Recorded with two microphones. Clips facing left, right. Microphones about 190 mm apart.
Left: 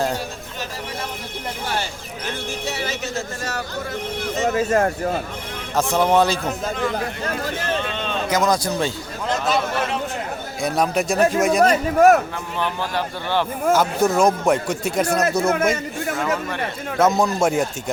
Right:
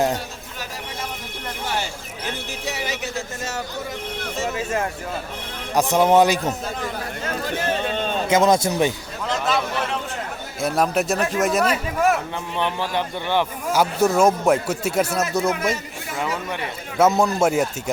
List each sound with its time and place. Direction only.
2.6 s a sound: 15° right (ahead or behind)
4.5 s speech: 40° left (ahead or behind)
5.7 s speech: 15° right (ahead or behind)
7.9 s a sound: 45° right (ahead or behind)
8.3 s speech: 25° right (ahead or behind)
10.6 s speech: centre (ahead or behind)
11.6 s speech: 45° left (ahead or behind)
12.5 s speech: 20° right (ahead or behind); by 15.5 s centre (ahead or behind)
16.1 s speech: 15° right (ahead or behind)
17.0 s speech: centre (ahead or behind)